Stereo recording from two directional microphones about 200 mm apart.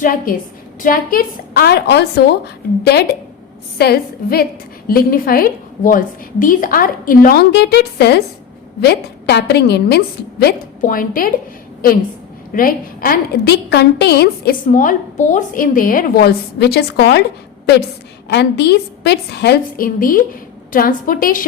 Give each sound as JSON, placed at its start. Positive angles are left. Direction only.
{"t": 0.0, "sound": "a woman's voice", "side_deg": 45}
{"t": 10.4, "sound": "a woman's voice", "side_deg": 45}
{"t": 12.5, "sound": "a woman's voice", "side_deg": 45}
{"t": 18.3, "sound": "a woman's voice", "side_deg": 55}